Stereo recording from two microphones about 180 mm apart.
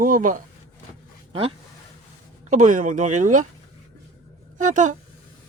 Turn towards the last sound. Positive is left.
turn(degrees=-45)  # may be behind; listen again after turning